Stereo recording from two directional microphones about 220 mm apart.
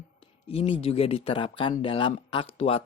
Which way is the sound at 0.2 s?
25° left (ahead or behind).